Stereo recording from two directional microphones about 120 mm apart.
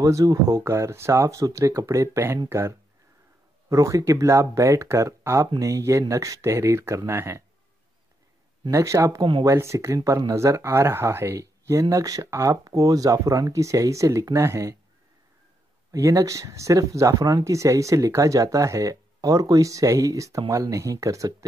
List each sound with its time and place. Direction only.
0.0 s speech: 30° right (ahead or behind)
8.6 s speech: 25° right (ahead or behind)
15.9 s speech: 30° right (ahead or behind)